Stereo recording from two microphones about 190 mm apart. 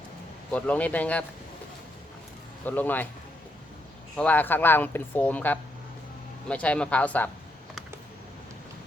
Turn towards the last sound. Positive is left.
turn(degrees=10)  # may be behind; listen again after turning